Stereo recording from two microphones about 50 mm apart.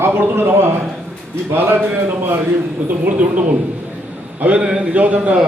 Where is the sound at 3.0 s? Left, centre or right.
Right.